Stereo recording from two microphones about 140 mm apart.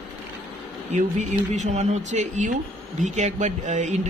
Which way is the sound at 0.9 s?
60° right (ahead or behind).